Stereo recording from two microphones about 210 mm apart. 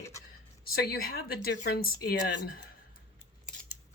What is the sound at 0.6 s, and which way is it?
Speech, 45° left (ahead or behind).